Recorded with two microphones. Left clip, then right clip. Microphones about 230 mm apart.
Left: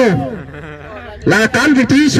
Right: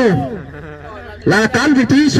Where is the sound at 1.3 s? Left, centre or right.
Left.